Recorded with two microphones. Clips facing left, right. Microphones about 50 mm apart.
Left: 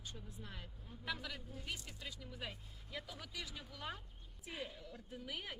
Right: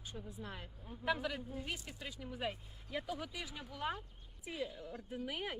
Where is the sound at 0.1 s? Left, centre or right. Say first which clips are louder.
Right 9 dB; right.